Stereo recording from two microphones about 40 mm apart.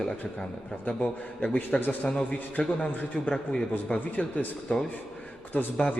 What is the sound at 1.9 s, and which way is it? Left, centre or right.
A man's voice, left.